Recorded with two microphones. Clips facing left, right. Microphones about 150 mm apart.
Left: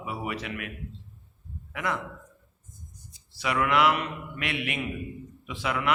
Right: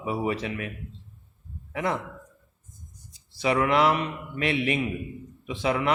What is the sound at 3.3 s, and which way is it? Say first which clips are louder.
A man's voice: right 3 dB; 30° right (ahead or behind).